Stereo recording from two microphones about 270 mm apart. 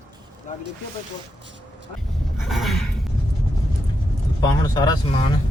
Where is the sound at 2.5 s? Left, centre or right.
Centre.